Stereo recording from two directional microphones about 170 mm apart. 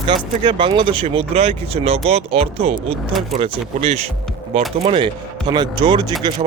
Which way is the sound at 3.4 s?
40° right (ahead or behind).